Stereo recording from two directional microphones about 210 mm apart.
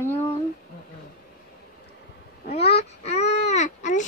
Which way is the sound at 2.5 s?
30° left (ahead or behind).